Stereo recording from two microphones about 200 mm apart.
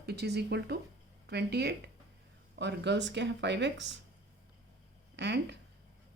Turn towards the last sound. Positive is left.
turn(degrees=-60)  # may be behind; listen again after turning